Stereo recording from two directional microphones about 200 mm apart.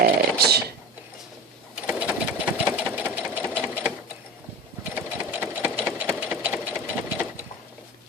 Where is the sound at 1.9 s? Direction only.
5° right (ahead or behind).